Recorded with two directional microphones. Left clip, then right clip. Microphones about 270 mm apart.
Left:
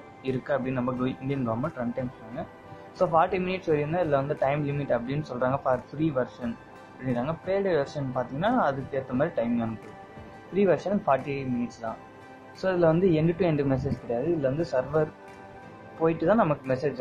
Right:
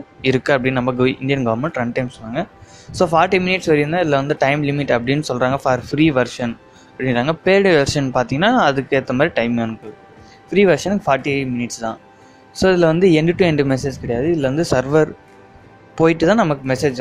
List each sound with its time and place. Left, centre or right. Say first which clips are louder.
0.2 s speech: right 12 dB; right
2.9 s speech: right 9 dB; right